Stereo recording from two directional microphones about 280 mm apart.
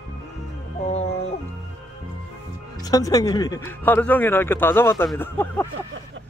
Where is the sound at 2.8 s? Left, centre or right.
Centre.